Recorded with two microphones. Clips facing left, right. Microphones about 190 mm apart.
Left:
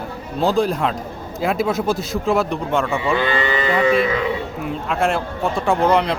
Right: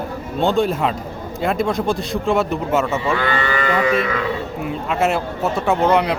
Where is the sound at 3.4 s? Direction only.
20° left (ahead or behind).